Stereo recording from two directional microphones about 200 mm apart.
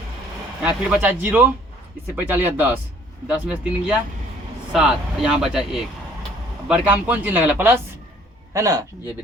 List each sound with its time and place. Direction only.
0.6 s speech: 5° right (ahead or behind)